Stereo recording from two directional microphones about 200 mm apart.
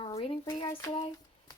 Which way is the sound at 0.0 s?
30° left (ahead or behind).